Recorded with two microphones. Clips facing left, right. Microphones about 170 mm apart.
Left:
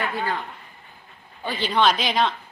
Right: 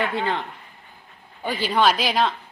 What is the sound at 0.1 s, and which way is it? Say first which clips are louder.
Speech: right 2 dB; 25° right (ahead or behind).